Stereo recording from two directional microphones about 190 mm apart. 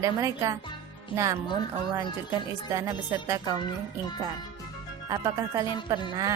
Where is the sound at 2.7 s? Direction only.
15° right (ahead or behind).